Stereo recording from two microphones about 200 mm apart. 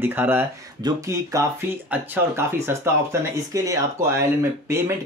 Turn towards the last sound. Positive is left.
turn(degrees=-15)  # may be behind; listen again after turning